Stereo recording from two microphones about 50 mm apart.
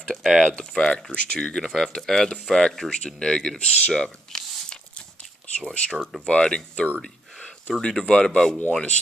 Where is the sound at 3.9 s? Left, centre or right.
Centre.